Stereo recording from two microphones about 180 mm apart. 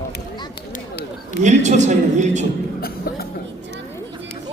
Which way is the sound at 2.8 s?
60° left (ahead or behind).